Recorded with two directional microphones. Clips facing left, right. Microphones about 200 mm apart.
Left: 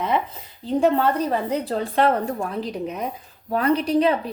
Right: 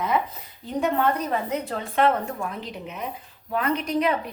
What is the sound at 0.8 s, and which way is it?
A woman's voice, 30° left (ahead or behind).